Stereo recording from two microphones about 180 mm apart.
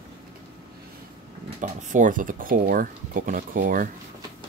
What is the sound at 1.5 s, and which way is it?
Speech, 45° right (ahead or behind).